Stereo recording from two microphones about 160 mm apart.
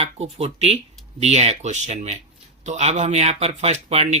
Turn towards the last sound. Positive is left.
turn(degrees=-45)  # may be behind; listen again after turning